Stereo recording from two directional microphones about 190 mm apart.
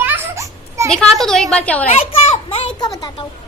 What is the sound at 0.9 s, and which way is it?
Speech, centre (ahead or behind).